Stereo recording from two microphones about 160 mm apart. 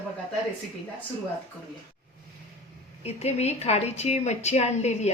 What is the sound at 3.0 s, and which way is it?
A woman's voice, 40° left (ahead or behind).